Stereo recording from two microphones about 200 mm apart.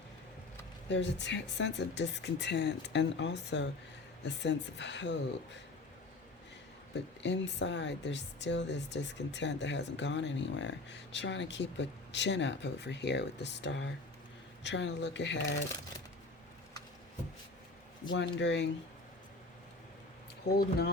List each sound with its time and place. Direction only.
0.9 s speech: 65° left (ahead or behind)
7.2 s speech: 60° left (ahead or behind)
18.1 s speech: 65° left (ahead or behind)
20.5 s speech: 55° left (ahead or behind)